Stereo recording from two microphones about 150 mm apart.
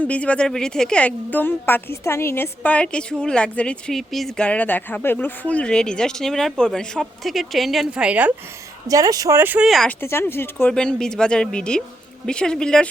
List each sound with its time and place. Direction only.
0.0 s a woman's voice: 10° left (ahead or behind); by 8.3 s 10° right (ahead or behind)
8.9 s speech: 25° right (ahead or behind)
9.6 s speech: centre (ahead or behind)
10.0 s speech: 15° left (ahead or behind)